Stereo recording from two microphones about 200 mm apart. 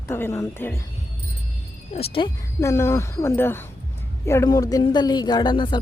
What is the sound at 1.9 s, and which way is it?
Speech, 30° left (ahead or behind).